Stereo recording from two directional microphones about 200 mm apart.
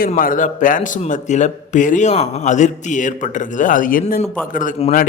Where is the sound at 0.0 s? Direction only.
45° left (ahead or behind).